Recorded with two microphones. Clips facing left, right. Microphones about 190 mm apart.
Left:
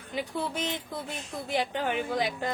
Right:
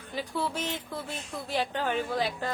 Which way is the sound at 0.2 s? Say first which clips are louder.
Even; 15° left (ahead or behind).